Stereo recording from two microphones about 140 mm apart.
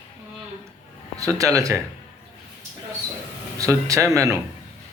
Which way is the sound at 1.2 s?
25° right (ahead or behind).